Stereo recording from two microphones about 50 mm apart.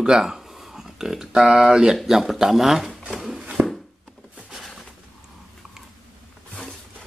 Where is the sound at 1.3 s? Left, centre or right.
Centre.